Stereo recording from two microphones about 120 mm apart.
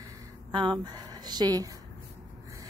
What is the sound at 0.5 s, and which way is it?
Speech, 40° right (ahead or behind).